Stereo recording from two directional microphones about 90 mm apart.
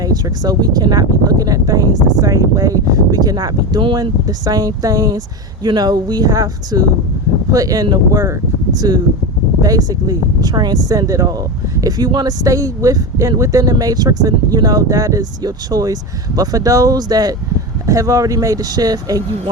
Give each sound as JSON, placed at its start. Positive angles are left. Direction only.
{"t": 0.0, "sound": "speech", "side_deg": -45}
{"t": 3.9, "sound": "speech", "side_deg": -45}